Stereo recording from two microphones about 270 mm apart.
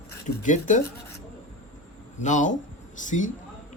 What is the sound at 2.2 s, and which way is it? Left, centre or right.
Speech, left.